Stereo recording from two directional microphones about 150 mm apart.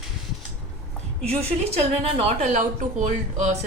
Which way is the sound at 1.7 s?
45° right (ahead or behind).